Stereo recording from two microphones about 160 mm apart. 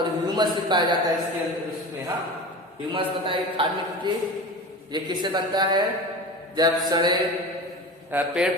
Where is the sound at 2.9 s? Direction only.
30° right (ahead or behind).